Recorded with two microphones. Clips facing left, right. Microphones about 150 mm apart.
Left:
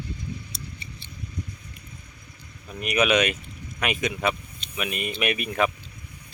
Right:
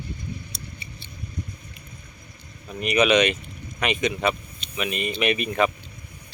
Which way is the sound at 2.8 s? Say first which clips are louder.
Right 3 dB; 5° left (ahead or behind).